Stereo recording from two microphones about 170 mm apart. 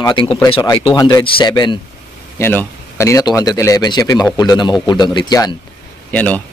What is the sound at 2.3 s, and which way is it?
Speech, 15° left (ahead or behind).